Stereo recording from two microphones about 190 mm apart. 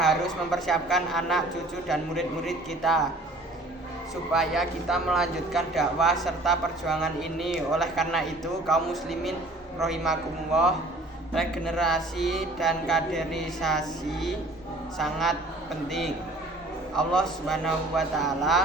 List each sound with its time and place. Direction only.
0.0 s a woman's voice: centre (ahead or behind)
4.3 s speech: centre (ahead or behind)
16.9 s speech: 5° left (ahead or behind)